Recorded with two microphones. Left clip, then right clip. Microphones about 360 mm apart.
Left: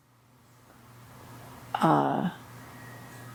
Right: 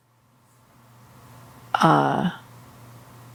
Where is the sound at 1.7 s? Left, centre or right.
Right.